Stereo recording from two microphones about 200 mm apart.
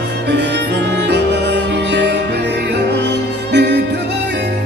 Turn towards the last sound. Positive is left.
turn(degrees=-60)  # may be behind; listen again after turning